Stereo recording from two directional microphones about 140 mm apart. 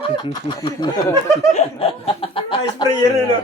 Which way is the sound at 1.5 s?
45° left (ahead or behind).